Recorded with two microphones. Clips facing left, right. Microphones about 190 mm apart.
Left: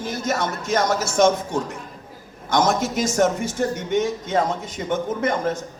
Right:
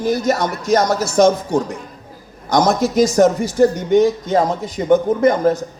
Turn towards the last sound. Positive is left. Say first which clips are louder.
# right 8 dB
turn(degrees=-35)  # may be behind; listen again after turning